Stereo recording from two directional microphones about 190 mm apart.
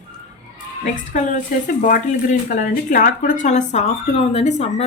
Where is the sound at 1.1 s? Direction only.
40° left (ahead or behind).